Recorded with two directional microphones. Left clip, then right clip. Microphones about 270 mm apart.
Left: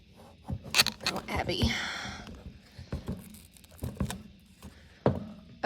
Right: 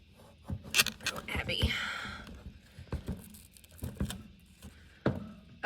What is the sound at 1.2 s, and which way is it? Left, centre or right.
Whispering, centre.